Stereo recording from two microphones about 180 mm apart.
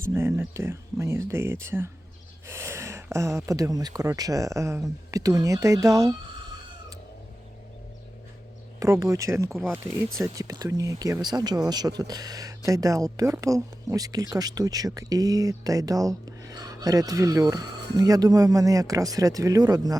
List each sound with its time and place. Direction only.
0.0 s speech: 15° right (ahead or behind)
8.8 s speech: 15° right (ahead or behind)